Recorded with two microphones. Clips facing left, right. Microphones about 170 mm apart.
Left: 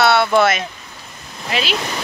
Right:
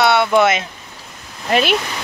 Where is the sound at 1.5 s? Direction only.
50° right (ahead or behind).